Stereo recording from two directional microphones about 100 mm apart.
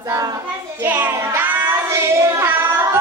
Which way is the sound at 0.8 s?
20° right (ahead or behind).